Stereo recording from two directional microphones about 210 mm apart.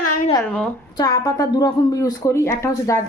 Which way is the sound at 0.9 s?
20° left (ahead or behind).